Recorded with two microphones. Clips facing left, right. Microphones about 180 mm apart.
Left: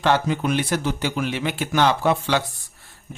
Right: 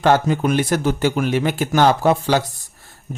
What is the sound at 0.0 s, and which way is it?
Speech, 45° right (ahead or behind).